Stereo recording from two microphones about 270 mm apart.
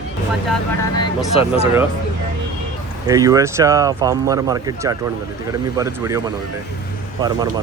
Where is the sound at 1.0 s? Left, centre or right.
Centre.